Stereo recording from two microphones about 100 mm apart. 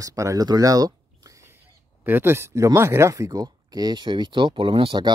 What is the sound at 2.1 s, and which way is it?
Speech, 25° right (ahead or behind).